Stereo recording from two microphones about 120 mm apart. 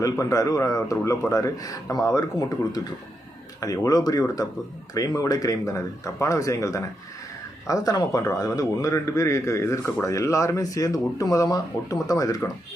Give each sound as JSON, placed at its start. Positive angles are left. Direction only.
{"t": 0.0, "sound": "a man's voice", "side_deg": 30}